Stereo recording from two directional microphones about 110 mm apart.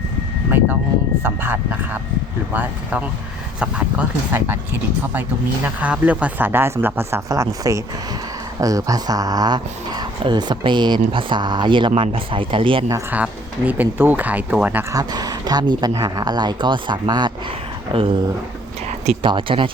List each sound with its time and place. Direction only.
0.5 s speech: 20° right (ahead or behind)
5.6 s speech: 10° right (ahead or behind); by 12.8 s 50° right (ahead or behind)
13.7 s speech: 15° right (ahead or behind)
14.9 s speech: 35° right (ahead or behind)
19.2 s speech: 50° right (ahead or behind)